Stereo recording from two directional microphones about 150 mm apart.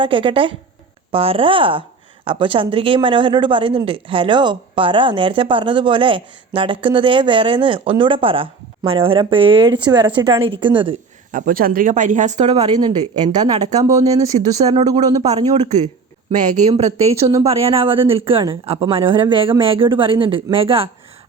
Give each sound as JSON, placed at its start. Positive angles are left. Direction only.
{"t": 0.0, "sound": "a woman's voice", "side_deg": -35}
{"t": 11.3, "sound": "speech", "side_deg": -60}
{"t": 12.6, "sound": "speech", "side_deg": -30}
{"t": 16.3, "sound": "a woman's voice", "side_deg": -50}